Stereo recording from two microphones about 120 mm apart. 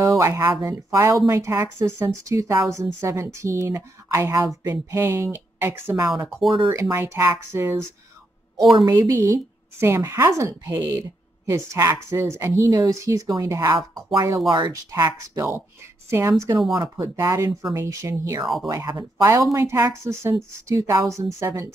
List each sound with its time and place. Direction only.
0.0 s speech: 25° right (ahead or behind)
8.8 s speech: 30° right (ahead or behind)
18.4 s speech: centre (ahead or behind)
18.7 s speech: 30° right (ahead or behind)